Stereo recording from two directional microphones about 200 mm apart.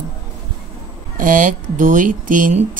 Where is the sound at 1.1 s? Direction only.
40° right (ahead or behind).